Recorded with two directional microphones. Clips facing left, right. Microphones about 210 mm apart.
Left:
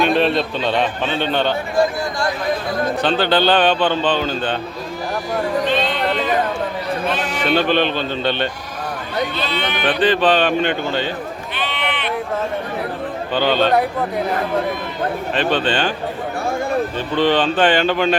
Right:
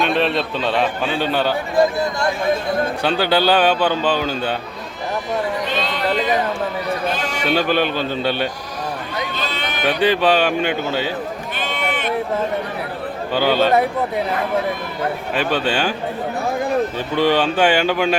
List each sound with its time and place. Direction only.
0.0 s a man's voice: centre (ahead or behind)
3.0 s a man's voice: 10° right (ahead or behind)
7.3 s a man's voice: 10° right (ahead or behind)
9.5 s speech: 45° right (ahead or behind)
10.0 s a man's voice: 10° right (ahead or behind)
11.5 s sheep: 45° right (ahead or behind)
13.3 s a man's voice: 10° right (ahead or behind)
15.4 s a man's voice: 10° right (ahead or behind)
17.2 s a man's voice: 10° right (ahead or behind)